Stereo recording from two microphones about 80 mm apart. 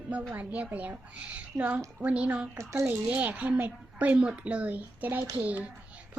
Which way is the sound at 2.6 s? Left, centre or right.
Right.